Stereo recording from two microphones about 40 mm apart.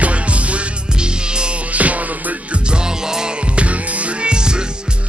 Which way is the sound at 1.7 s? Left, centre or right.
Right.